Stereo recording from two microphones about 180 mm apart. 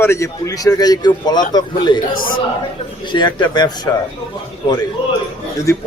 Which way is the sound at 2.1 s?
50° left (ahead or behind).